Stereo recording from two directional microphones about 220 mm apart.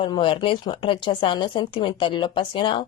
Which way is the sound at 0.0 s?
20° left (ahead or behind).